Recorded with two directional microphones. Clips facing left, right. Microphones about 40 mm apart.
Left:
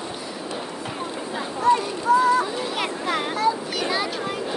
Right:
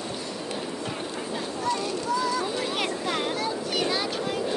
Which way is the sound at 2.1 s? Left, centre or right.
Left.